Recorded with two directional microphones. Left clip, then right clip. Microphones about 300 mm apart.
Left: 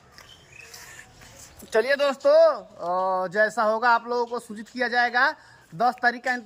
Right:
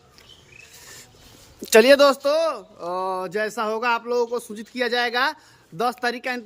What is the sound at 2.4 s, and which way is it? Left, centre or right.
Speech, centre.